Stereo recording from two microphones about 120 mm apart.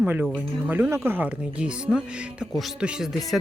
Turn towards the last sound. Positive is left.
turn(degrees=-5)  # may be behind; listen again after turning